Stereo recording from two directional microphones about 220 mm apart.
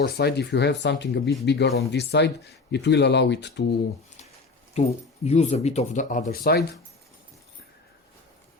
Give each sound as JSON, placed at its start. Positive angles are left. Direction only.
{"t": 0.0, "sound": "speech", "side_deg": 45}
{"t": 4.8, "sound": "speech", "side_deg": 30}